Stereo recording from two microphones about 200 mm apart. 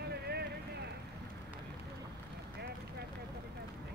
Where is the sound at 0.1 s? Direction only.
55° right (ahead or behind).